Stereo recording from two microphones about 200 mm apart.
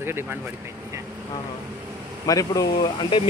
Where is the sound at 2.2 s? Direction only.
15° left (ahead or behind).